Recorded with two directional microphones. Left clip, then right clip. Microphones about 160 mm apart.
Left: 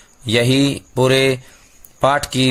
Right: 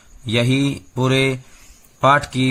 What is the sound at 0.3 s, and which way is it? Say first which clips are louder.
Speech: left 4 dB; 30° left (ahead or behind).